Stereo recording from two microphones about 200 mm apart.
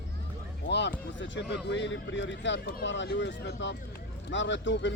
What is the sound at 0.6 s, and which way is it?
Speech, 55° left (ahead or behind).